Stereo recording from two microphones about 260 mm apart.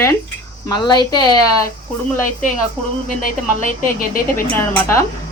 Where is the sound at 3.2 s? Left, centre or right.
Left.